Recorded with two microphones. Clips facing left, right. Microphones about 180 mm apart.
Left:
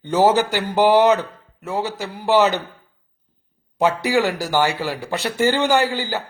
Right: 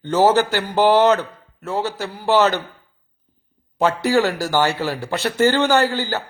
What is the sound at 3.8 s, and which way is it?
A man's voice, 15° left (ahead or behind).